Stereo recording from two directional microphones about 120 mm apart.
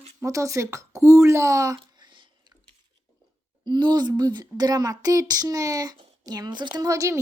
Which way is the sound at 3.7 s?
40° right (ahead or behind).